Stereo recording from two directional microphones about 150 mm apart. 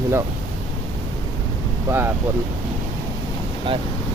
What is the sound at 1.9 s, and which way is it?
Speech, 15° right (ahead or behind).